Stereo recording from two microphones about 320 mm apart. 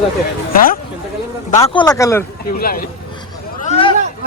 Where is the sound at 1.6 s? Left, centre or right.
Centre.